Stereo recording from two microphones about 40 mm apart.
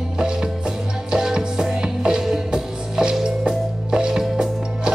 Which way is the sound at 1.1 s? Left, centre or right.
Centre.